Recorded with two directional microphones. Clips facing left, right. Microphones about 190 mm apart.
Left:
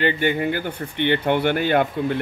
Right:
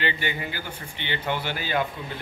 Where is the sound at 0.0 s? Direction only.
50° left (ahead or behind).